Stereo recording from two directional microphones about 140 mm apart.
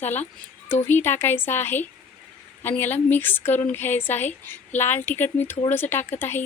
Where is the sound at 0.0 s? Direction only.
15° left (ahead or behind).